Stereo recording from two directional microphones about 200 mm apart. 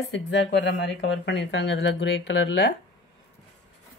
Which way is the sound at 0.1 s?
65° left (ahead or behind).